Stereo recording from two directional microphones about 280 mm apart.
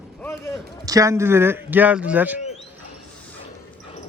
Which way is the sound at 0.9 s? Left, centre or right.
Centre.